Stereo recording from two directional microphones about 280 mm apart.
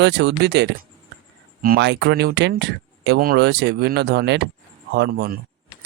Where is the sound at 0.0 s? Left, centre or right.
Right.